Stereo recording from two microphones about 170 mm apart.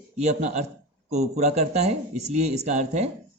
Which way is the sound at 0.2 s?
40° right (ahead or behind).